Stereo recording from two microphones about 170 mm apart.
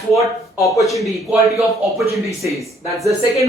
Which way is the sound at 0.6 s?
20° left (ahead or behind).